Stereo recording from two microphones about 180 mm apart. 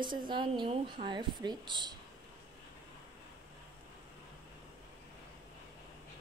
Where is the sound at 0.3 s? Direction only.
25° right (ahead or behind).